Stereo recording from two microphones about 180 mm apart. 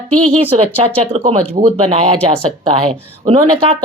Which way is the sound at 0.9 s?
30° right (ahead or behind).